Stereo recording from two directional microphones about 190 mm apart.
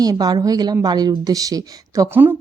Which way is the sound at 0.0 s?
20° right (ahead or behind).